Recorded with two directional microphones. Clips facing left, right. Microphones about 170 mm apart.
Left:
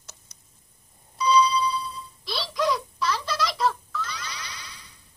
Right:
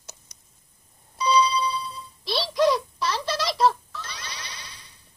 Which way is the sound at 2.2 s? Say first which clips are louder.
Right 5 dB; 25° right (ahead or behind).